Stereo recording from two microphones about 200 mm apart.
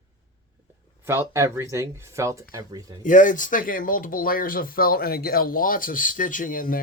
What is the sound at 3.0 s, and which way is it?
Speech, 40° left (ahead or behind).